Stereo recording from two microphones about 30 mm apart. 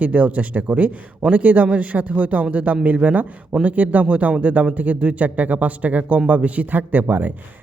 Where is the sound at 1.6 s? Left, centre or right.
Right.